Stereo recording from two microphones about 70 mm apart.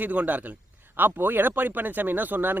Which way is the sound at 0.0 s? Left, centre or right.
Right.